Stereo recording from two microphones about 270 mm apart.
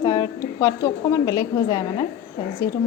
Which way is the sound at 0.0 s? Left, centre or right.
Centre.